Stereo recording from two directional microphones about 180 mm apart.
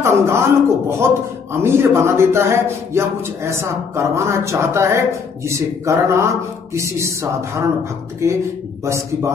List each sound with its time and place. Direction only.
0.0 s a man's voice: 15° right (ahead or behind)